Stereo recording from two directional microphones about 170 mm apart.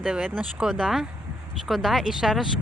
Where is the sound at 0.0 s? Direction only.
5° right (ahead or behind).